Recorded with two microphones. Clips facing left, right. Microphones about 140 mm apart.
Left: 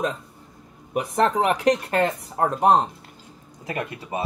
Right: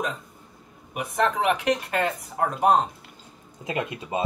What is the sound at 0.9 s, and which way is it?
Speech, 35° left (ahead or behind).